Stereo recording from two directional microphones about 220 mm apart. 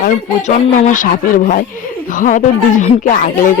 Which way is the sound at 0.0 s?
35° left (ahead or behind).